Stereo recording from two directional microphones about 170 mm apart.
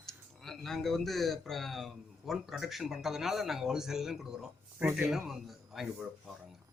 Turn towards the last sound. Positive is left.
turn(degrees=0)  # may be behind; listen again after turning